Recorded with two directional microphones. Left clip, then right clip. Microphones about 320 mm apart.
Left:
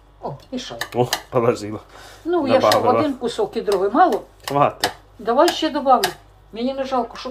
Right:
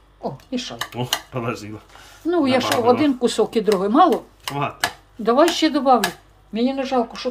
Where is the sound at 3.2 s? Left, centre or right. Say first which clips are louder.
Right 3 dB; right.